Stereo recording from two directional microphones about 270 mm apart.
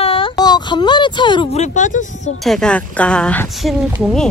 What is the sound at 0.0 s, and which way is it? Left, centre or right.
Speech, centre.